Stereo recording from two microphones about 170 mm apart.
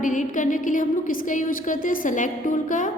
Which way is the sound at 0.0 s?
50° left (ahead or behind).